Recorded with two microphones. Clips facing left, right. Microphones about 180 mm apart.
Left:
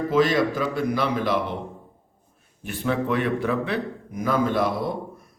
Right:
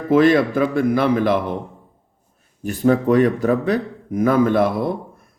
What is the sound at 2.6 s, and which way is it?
A man's voice, 40° right (ahead or behind).